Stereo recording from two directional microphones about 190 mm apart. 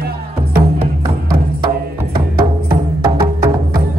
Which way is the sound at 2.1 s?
55° right (ahead or behind).